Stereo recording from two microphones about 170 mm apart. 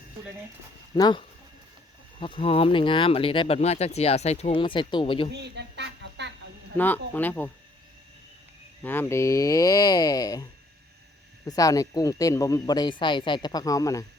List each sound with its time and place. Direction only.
0.9 s speech: 25° left (ahead or behind)
5.3 s a sound: 85° right
6.7 s speech: 10° left (ahead or behind)
8.8 s speech: 10° left (ahead or behind)